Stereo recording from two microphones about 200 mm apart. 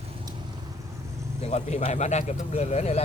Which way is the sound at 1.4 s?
30° left (ahead or behind).